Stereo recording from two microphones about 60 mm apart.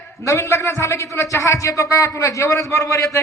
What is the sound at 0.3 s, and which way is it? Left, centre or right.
A woman's voice, left.